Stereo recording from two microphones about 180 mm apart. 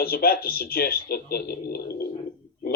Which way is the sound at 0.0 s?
55° left (ahead or behind).